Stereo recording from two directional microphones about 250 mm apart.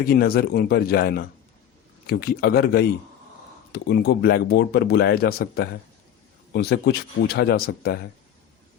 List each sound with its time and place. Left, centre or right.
0.0 s speech: left